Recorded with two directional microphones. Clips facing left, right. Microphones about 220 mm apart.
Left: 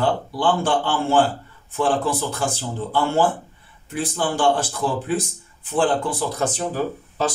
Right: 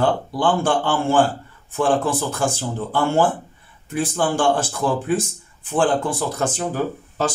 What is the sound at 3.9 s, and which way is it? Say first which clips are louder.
Speech: right 3 dB; 50° right (ahead or behind).